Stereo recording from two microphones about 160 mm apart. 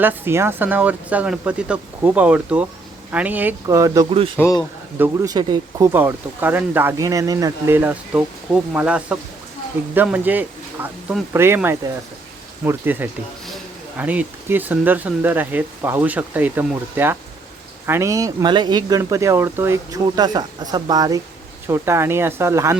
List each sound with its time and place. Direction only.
0.0 s speech: 15° right (ahead or behind)
4.1 s speech: 35° right (ahead or behind)
4.4 s speech: 20° left (ahead or behind)
4.9 s speech: 10° right (ahead or behind)
5.3 s speech: 25° right (ahead or behind)